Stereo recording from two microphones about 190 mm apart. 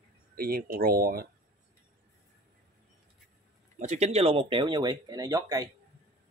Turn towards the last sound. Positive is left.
turn(degrees=-20)  # may be behind; listen again after turning